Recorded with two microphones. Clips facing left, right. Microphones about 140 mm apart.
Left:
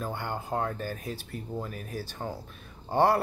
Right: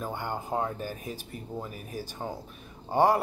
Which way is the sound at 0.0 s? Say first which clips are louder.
Even; 15° right (ahead or behind).